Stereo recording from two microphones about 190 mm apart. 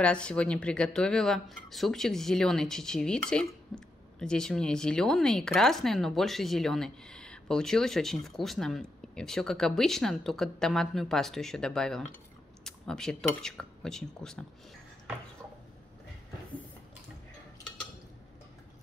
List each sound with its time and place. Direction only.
0.0 s speech: 5° left (ahead or behind)